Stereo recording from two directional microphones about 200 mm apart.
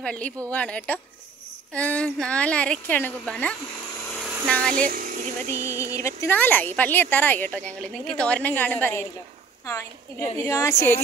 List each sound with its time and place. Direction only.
0.0 s a woman's voice: 5° left (ahead or behind)
4.8 s speech: 45° right (ahead or behind)
5.5 s a woman's voice: 15° left (ahead or behind)